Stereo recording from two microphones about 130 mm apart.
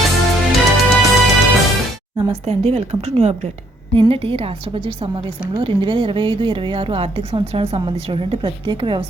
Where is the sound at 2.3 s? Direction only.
55° right (ahead or behind).